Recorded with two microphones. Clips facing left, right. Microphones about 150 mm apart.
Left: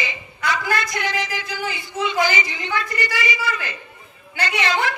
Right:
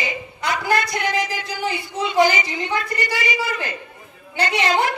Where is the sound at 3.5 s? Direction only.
45° right (ahead or behind).